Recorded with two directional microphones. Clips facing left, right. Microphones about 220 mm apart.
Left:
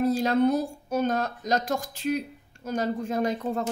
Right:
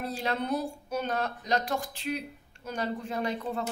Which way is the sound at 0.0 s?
45° left (ahead or behind).